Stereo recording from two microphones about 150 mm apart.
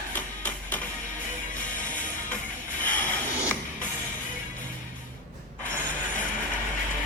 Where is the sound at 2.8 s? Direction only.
10° left (ahead or behind).